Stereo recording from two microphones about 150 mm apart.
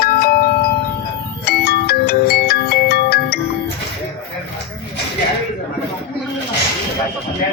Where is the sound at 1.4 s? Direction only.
90° left.